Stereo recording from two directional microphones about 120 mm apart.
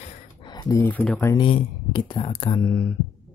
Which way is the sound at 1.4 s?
40° left (ahead or behind).